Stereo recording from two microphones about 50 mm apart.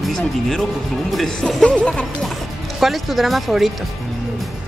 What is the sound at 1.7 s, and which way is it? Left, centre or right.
Speech, left.